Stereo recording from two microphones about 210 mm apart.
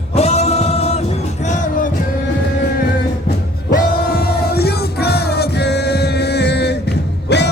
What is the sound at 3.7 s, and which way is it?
Music, 45° left (ahead or behind).